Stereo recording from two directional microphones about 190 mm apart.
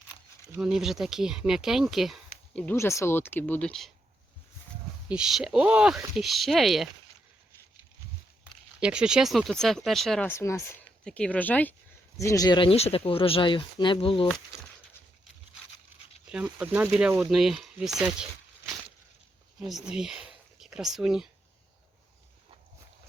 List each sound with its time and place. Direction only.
0.6 s speech: 5° right (ahead or behind)
5.0 s speech: 5° right (ahead or behind)
8.8 s speech: 5° right (ahead or behind)
10.2 s speech: 15° left (ahead or behind)
16.3 s speech: 5° right (ahead or behind)